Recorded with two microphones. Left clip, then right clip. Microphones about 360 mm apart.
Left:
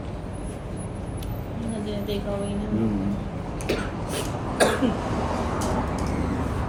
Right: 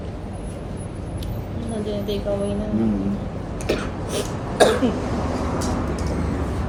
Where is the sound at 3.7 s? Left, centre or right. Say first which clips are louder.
Right 3 dB; centre.